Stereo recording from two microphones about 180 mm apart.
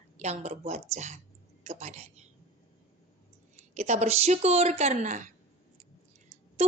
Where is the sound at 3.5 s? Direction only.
40° right (ahead or behind).